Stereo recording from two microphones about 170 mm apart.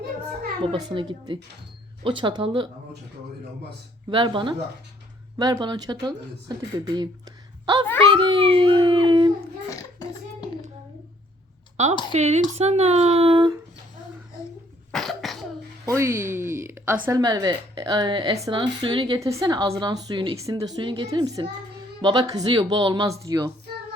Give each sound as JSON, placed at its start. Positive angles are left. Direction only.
{"t": 0.6, "sound": "a woman's voice", "side_deg": -30}
{"t": 4.1, "sound": "a woman's voice", "side_deg": -30}
{"t": 9.0, "sound": "dog", "side_deg": -30}
{"t": 9.6, "sound": "a sound", "side_deg": 20}
{"t": 12.1, "sound": "speech", "side_deg": -40}
{"t": 14.9, "sound": "cough", "side_deg": 0}
{"t": 15.9, "sound": "a sound", "side_deg": -15}
{"t": 17.1, "sound": "a woman's voice", "side_deg": -20}